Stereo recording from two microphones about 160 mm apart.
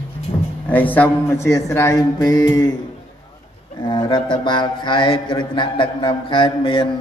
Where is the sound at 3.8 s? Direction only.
30° left (ahead or behind).